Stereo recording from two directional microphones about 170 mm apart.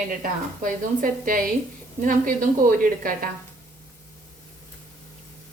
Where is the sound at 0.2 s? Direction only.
55° right (ahead or behind).